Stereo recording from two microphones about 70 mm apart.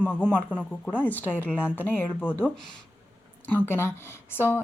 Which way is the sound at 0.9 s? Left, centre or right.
Left.